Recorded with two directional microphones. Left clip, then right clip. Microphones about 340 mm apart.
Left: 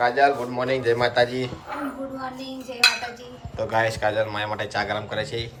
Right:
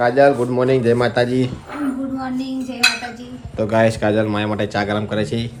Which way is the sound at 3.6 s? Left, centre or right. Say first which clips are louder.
Right 6 dB; centre.